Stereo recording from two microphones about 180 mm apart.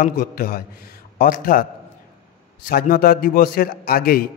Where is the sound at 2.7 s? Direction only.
55° left (ahead or behind).